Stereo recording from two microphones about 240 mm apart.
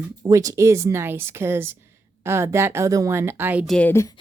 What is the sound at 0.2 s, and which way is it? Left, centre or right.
A woman's voice, centre.